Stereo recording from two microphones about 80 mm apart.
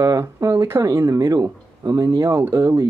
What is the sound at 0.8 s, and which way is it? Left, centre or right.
Speech, right.